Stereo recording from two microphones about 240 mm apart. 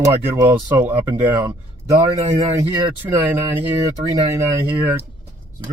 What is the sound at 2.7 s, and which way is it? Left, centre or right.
Speech, centre.